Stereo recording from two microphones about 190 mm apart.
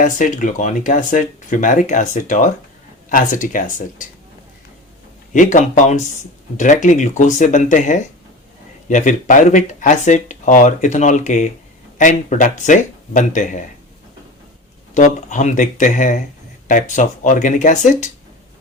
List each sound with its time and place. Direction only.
0.0 s speech: 40° left (ahead or behind)
5.3 s speech: 40° left (ahead or behind)
14.9 s speech: 40° left (ahead or behind)